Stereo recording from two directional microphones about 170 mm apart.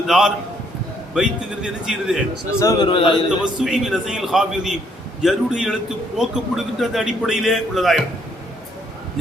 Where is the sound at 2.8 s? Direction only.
30° left (ahead or behind).